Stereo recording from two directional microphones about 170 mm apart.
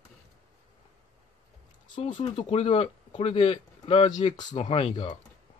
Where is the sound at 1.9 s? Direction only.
30° left (ahead or behind).